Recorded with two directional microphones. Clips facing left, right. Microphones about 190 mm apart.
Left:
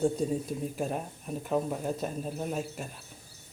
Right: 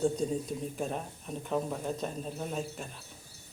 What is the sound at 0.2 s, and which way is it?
A man's voice, 5° left (ahead or behind).